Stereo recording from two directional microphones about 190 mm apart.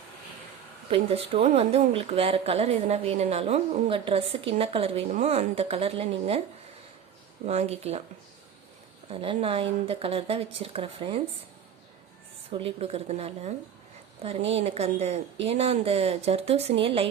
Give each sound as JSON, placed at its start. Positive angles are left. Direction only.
{"t": 0.9, "sound": "a woman's voice", "side_deg": -30}
{"t": 7.4, "sound": "a woman's voice", "side_deg": -35}
{"t": 9.0, "sound": "speech", "side_deg": -30}
{"t": 12.5, "sound": "a woman's voice", "side_deg": -30}